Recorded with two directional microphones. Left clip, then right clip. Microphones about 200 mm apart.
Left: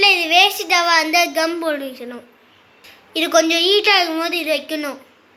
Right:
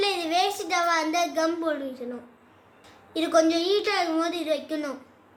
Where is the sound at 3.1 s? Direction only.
15° left (ahead or behind).